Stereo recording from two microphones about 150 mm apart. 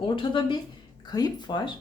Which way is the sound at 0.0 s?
35° left (ahead or behind).